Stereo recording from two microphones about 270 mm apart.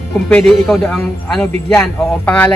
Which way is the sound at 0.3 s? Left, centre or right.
Centre.